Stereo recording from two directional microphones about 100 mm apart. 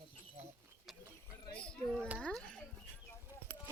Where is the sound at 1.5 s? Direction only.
10° left (ahead or behind).